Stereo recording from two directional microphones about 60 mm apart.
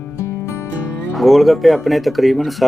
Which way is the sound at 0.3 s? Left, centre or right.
Left.